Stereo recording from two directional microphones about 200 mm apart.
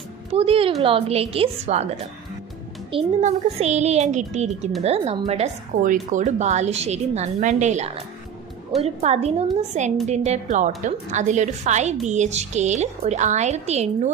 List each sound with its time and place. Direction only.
0.3 s a woman's voice: 30° right (ahead or behind)
2.9 s speech: 35° right (ahead or behind)